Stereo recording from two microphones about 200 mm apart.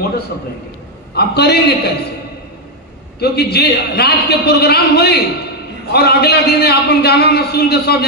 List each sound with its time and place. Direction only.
1.1 s a man's voice: 55° left (ahead or behind)
3.2 s a man's voice: 55° left (ahead or behind)